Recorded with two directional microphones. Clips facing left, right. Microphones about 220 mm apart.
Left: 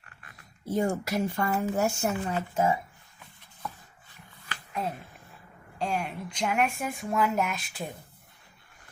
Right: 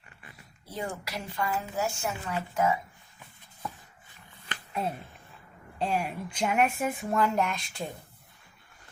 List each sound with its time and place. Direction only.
0.6 s speech: 45° left (ahead or behind)
2.2 s speech: 25° left (ahead or behind)
5.8 s speech: 5° right (ahead or behind)